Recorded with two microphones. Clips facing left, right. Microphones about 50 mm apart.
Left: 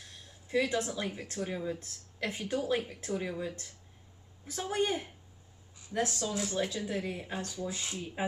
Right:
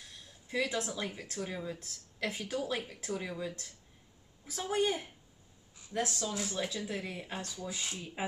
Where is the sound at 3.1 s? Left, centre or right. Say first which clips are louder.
Left 2 dB; centre.